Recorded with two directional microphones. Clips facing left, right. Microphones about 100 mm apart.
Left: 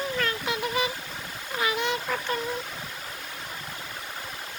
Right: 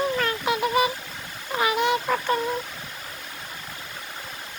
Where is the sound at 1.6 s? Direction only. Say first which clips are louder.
Right 5 dB; 55° right (ahead or behind).